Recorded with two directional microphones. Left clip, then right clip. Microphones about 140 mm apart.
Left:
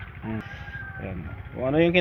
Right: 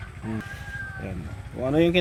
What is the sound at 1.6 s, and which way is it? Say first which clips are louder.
Speech: even; 15° right (ahead or behind).